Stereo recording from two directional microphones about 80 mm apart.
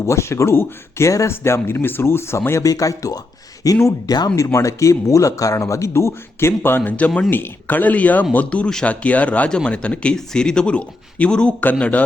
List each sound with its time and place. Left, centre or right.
0.0 s speech: left
2.6 s speech: left; by 12.0 s centre